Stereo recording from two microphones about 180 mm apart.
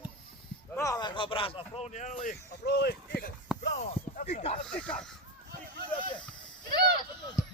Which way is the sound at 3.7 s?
45° left (ahead or behind).